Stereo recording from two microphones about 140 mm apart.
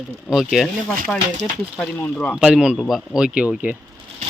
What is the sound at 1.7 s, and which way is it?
Speech, 10° left (ahead or behind).